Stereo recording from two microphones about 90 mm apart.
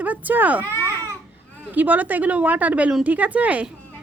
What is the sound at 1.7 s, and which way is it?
Speech, 20° right (ahead or behind).